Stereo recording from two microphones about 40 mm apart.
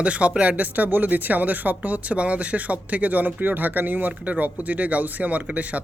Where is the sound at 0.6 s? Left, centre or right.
Right.